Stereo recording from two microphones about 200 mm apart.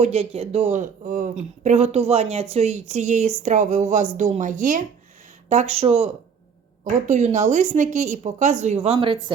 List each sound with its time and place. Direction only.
0.0 s speech: 30° right (ahead or behind)